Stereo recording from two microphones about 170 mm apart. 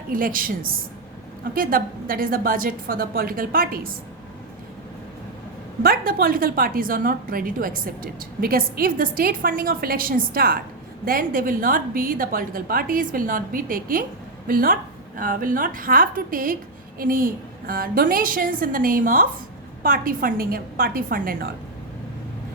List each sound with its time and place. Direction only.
0.1 s a woman's voice: 55° right (ahead or behind)
5.8 s a woman's voice: 60° right (ahead or behind)